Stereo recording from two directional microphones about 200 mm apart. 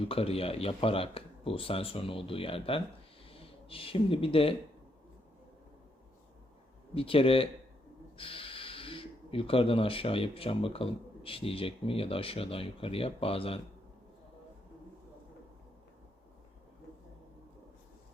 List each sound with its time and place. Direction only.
0.1 s speech: 30° left (ahead or behind)
6.9 s speech: 30° left (ahead or behind)